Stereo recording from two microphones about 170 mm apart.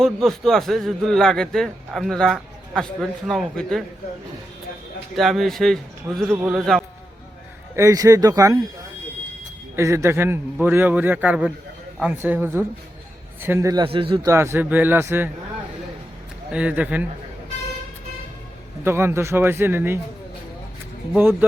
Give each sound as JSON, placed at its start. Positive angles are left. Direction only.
{"t": 0.0, "sound": "a man's voice", "side_deg": 0}
{"t": 5.1, "sound": "a man's voice", "side_deg": 0}
{"t": 6.3, "sound": "a man's voice", "side_deg": -10}
{"t": 7.8, "sound": "speech", "side_deg": -20}
{"t": 9.7, "sound": "a man's voice", "side_deg": -15}
{"t": 13.8, "sound": "a man's voice", "side_deg": -30}
{"t": 14.3, "sound": "a man's voice", "side_deg": -15}
{"t": 16.5, "sound": "a man's voice", "side_deg": -5}
{"t": 18.9, "sound": "a man's voice", "side_deg": -15}
{"t": 21.1, "sound": "a man's voice", "side_deg": -10}